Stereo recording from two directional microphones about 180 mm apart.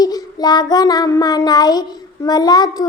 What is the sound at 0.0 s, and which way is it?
Child singing, 20° left (ahead or behind).